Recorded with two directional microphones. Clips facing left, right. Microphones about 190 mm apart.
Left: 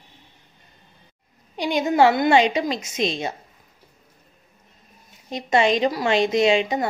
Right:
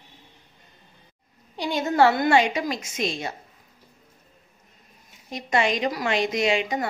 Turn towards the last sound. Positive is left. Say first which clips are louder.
# left 5 dB
turn(degrees=25)  # may be behind; listen again after turning